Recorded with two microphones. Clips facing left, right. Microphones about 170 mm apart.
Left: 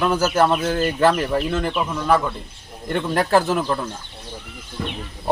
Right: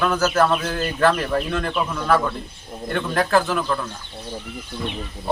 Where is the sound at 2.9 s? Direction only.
30° left (ahead or behind).